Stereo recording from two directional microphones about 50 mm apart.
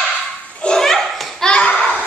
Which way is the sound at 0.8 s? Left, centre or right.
Centre.